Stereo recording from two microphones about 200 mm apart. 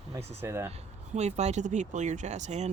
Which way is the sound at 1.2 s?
35° right (ahead or behind).